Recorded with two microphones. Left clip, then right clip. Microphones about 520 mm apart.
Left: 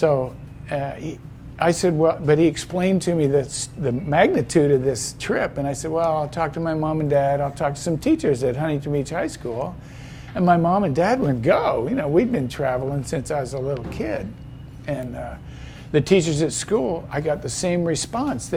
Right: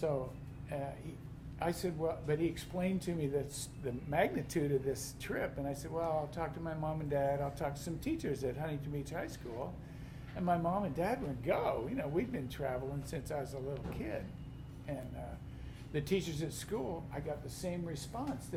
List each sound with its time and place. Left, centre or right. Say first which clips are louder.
0.7 s speech: left 16 dB; left